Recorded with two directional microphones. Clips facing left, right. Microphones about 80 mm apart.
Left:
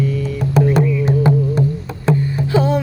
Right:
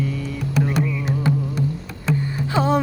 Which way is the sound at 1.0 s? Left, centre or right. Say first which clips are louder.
Left 7 dB; left.